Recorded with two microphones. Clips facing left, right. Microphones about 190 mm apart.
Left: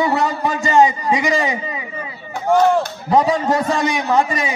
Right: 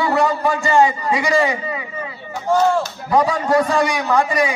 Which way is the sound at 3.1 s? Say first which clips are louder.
Left 1 dB; 20° left (ahead or behind).